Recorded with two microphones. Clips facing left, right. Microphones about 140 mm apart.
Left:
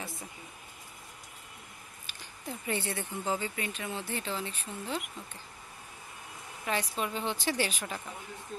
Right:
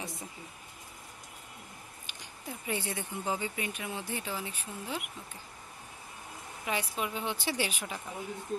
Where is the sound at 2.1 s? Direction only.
10° right (ahead or behind).